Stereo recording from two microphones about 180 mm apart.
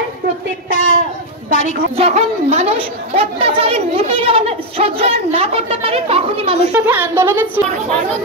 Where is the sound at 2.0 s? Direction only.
40° right (ahead or behind).